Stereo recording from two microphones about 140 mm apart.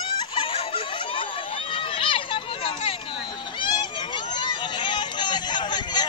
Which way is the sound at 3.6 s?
35° left (ahead or behind).